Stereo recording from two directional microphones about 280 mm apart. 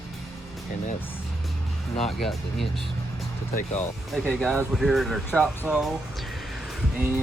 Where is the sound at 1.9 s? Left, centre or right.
Centre.